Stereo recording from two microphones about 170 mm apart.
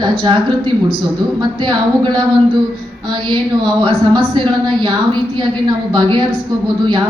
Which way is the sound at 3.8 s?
30° right (ahead or behind).